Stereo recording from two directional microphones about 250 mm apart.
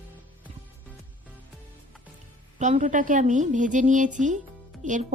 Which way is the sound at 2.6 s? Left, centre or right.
Right.